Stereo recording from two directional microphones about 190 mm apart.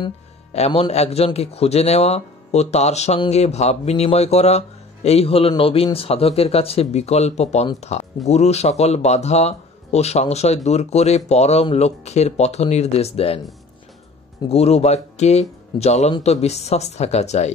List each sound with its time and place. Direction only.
0.5 s speech: 35° left (ahead or behind)
14.5 s speech: 35° left (ahead or behind)